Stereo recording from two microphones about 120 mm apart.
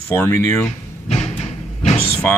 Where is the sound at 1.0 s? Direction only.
65° left (ahead or behind).